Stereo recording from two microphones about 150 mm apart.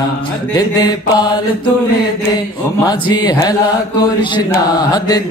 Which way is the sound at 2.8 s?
25° left (ahead or behind).